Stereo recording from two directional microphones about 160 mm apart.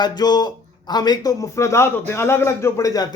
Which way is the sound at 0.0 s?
25° left (ahead or behind).